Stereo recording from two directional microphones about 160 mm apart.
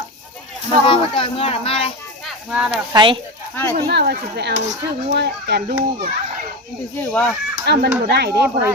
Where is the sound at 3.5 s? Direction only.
10° left (ahead or behind).